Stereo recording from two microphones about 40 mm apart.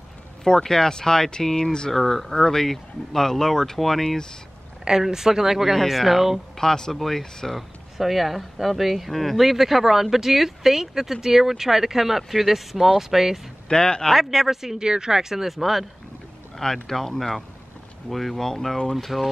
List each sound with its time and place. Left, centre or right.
0.4 s speech: centre
4.8 s speech: centre
6.6 s speech: centre
8.0 s speech: centre
13.7 s speech: centre
14.1 s speech: centre
16.5 s speech: centre